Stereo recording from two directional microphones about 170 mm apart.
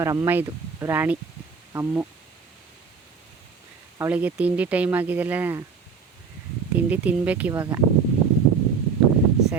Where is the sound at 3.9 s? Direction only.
10° right (ahead or behind).